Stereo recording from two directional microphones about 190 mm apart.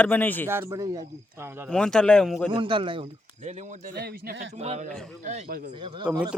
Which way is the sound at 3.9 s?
55° right (ahead or behind).